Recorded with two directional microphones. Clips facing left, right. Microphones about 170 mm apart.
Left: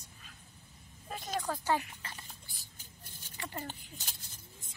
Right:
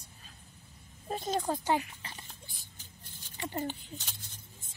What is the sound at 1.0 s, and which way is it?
Oink, 30° right (ahead or behind).